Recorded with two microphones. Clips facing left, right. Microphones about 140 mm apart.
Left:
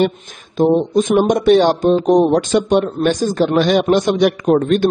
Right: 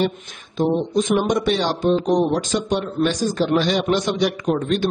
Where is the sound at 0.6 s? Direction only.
50° left (ahead or behind).